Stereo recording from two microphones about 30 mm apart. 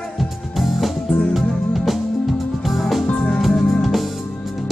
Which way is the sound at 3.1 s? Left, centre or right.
Left.